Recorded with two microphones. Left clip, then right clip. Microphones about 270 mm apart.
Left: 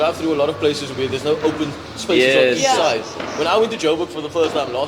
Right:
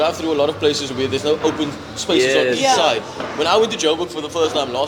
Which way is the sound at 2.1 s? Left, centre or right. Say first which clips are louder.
Left 2 dB; left.